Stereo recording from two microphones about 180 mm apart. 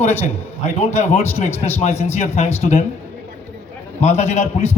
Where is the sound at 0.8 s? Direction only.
35° left (ahead or behind).